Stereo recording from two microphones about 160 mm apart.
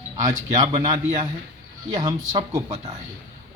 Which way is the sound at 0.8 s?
25° right (ahead or behind).